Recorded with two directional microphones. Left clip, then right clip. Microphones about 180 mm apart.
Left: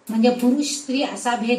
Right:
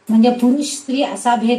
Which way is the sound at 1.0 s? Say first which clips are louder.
Right 7 dB; 35° right (ahead or behind).